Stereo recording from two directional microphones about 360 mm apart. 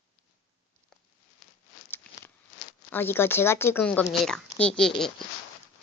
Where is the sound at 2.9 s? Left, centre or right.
Centre.